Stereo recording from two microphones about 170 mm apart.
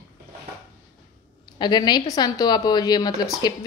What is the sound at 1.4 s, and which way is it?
A woman's voice, 25° left (ahead or behind).